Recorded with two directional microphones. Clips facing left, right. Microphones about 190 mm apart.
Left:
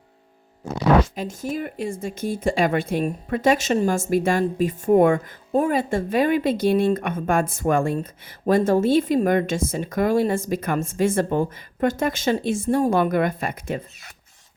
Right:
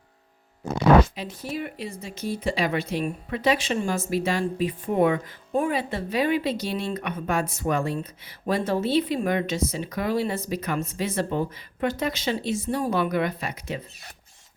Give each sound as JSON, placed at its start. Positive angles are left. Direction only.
{"t": 1.1, "sound": "speech", "side_deg": 45}